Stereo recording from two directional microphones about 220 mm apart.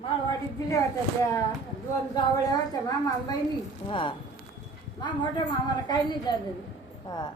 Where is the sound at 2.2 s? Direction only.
20° left (ahead or behind).